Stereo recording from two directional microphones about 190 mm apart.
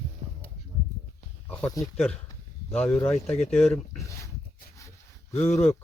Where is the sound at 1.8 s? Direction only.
Centre (ahead or behind).